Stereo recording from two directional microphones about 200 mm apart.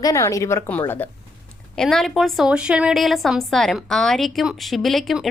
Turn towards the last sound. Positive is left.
turn(degrees=0)  # may be behind; listen again after turning